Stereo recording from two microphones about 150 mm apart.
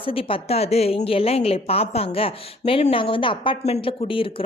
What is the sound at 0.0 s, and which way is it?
A woman's voice, 40° left (ahead or behind).